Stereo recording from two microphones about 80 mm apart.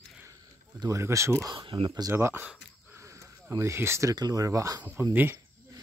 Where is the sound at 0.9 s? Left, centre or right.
Right.